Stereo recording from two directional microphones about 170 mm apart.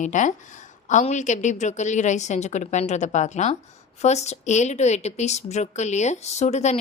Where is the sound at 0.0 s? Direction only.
45° left (ahead or behind).